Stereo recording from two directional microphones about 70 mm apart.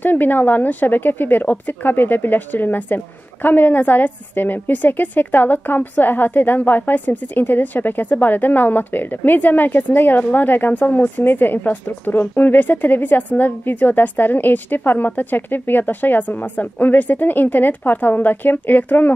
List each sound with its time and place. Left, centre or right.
0.0 s a woman's voice: left